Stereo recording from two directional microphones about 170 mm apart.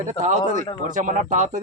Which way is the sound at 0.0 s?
45° right (ahead or behind).